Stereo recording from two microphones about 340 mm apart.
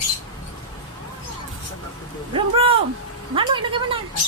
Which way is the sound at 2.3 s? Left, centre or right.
Centre.